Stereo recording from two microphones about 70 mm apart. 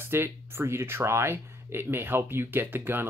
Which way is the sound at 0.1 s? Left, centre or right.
Right.